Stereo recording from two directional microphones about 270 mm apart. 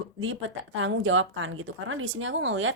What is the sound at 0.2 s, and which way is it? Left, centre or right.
A woman's voice, right.